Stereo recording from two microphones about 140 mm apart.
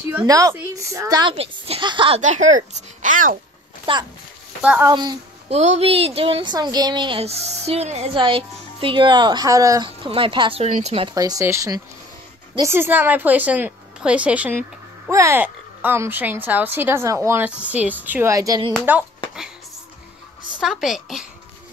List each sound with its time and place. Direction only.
0.2 s speech: 25° right (ahead or behind)
1.3 s a woman's voice: 45° right (ahead or behind)
2.1 s speech: 60° right (ahead or behind)
3.9 s a woman's voice: 40° right (ahead or behind)
5.5 s speech: 50° right (ahead or behind)
8.1 s a woman's voice: 40° right (ahead or behind)
9.8 s a woman's voice: 40° right (ahead or behind)
10.6 s speech: 50° right (ahead or behind)
11.1 s speech: 25° right (ahead or behind); by 14.6 s 10° right (ahead or behind)
15.0 s speech: 20° right (ahead or behind)
20.6 s a woman's voice: centre (ahead or behind)